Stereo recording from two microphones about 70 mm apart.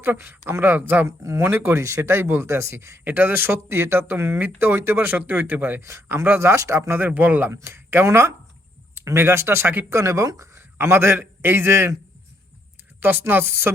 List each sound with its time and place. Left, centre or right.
0.0 s speech: right
1.0 s speech: right
3.0 s speech: right
5.8 s speech: right
7.0 s speech: right
7.5 s speech: right
13.0 s speech: right